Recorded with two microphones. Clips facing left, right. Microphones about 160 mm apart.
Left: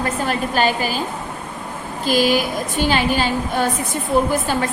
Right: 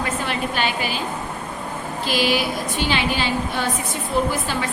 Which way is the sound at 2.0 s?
45° left (ahead or behind).